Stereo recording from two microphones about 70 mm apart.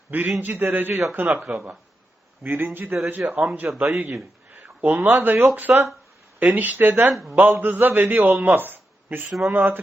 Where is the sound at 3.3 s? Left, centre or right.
Right.